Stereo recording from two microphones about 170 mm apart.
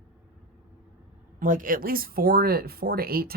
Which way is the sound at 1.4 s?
55° right (ahead or behind).